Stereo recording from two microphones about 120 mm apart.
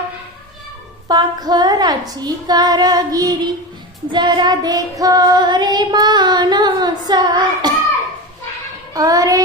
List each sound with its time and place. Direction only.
1.0 s child singing: 35° right (ahead or behind)
8.9 s child singing: 30° right (ahead or behind)